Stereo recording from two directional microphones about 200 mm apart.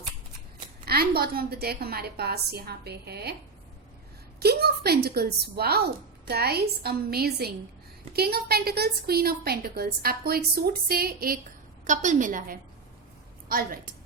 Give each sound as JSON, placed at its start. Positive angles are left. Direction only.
{"t": 0.9, "sound": "a woman's voice", "side_deg": -50}
{"t": 4.4, "sound": "a woman's voice", "side_deg": -55}